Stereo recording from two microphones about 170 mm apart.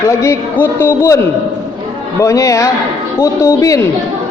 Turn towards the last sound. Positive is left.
turn(degrees=20)  # may be behind; listen again after turning